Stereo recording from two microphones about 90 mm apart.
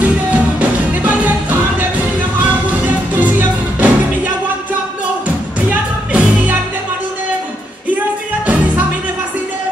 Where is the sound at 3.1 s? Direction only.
20° right (ahead or behind).